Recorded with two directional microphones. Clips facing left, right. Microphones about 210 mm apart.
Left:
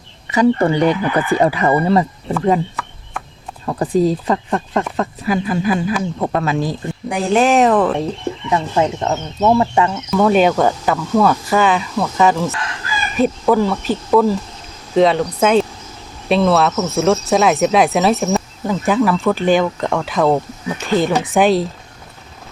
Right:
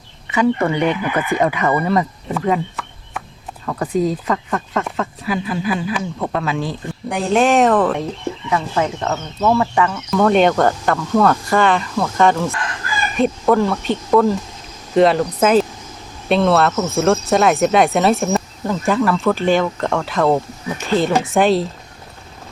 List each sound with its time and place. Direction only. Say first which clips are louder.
0.3 s speech: left 3 dB; 35° left (ahead or behind)
3.7 s speech: left 3 dB; 30° left (ahead or behind)
5.2 s speech: left 4 dB; 45° left (ahead or behind)
7.1 s speech: left 1 dB; centre (ahead or behind)
8.4 s speech: left 3 dB; 25° left (ahead or behind)
10.1 s speech: even; 5° left (ahead or behind)